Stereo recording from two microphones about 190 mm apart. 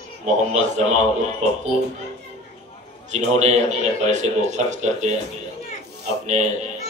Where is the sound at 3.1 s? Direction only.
40° right (ahead or behind).